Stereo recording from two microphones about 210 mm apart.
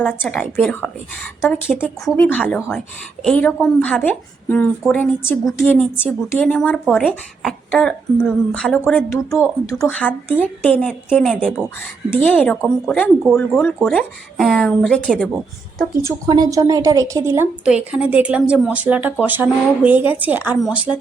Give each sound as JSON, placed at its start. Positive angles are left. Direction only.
{"t": 0.0, "sound": "a woman's voice", "side_deg": 5}
{"t": 2.4, "sound": "a woman's voice", "side_deg": -5}
{"t": 16.0, "sound": "a woman's voice", "side_deg": -15}